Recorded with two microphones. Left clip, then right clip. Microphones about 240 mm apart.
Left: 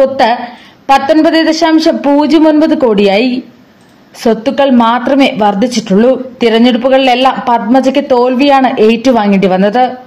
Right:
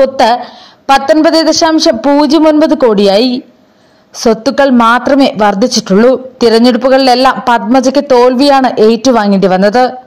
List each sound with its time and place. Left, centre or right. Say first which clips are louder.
0.0 s speech: right 1 dB; right